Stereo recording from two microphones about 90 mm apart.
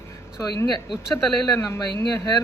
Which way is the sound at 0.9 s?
5° right (ahead or behind).